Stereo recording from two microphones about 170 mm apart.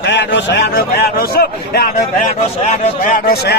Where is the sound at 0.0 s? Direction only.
90° left; by 1.9 s 65° left (ahead or behind).